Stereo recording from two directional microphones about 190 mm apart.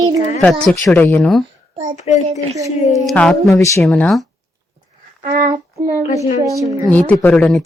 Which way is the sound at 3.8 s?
5° left (ahead or behind).